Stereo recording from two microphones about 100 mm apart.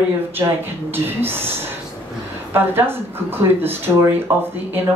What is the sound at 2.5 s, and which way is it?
Speech, 20° right (ahead or behind).